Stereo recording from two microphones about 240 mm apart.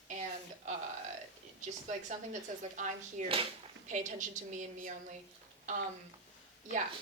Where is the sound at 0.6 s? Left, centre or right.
Right.